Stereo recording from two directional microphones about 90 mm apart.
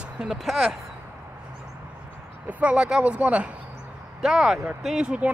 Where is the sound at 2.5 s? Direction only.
15° right (ahead or behind).